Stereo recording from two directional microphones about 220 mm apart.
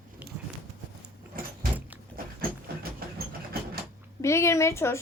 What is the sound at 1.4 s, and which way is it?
Vehicle, 40° right (ahead or behind).